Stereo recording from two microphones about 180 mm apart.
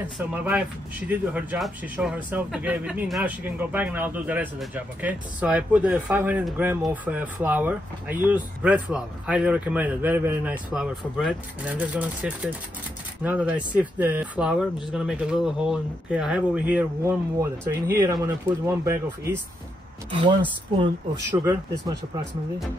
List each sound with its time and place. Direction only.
0.2 s speech: 10° right (ahead or behind)
20.2 s speech: 25° right (ahead or behind)